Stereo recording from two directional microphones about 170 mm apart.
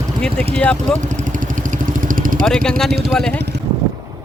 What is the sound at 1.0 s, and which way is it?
Vehicle, 45° right (ahead or behind).